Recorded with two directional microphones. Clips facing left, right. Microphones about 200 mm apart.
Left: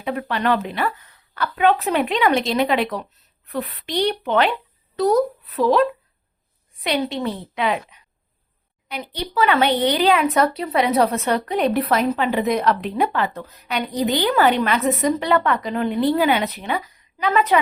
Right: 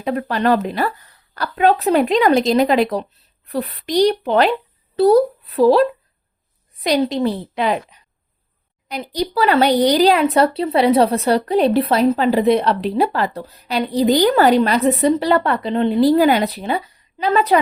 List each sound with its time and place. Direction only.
0.0 s speech: 40° right (ahead or behind)